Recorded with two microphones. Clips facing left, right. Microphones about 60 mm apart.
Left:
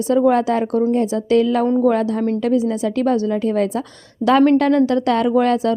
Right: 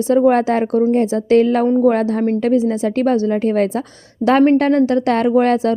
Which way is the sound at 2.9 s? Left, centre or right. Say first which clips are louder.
Right 2 dB; right.